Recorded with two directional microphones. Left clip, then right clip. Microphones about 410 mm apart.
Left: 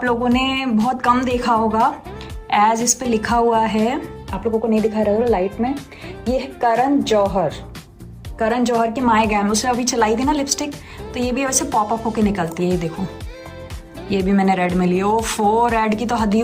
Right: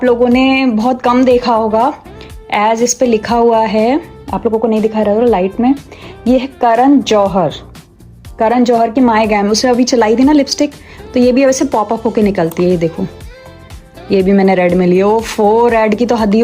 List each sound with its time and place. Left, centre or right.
0.0 s a woman's voice: centre
14.1 s speech: centre